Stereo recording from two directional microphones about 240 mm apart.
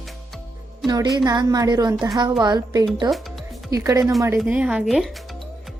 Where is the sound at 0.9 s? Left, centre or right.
Centre.